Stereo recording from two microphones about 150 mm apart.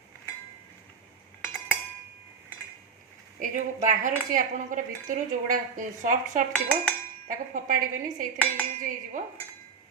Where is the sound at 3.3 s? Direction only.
60° right (ahead or behind).